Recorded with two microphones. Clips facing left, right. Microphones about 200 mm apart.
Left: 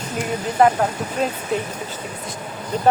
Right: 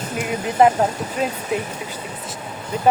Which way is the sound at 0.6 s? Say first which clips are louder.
Right 1 dB; 20° right (ahead or behind).